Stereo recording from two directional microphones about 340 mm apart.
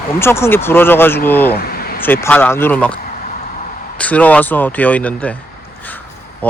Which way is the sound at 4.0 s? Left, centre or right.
Centre.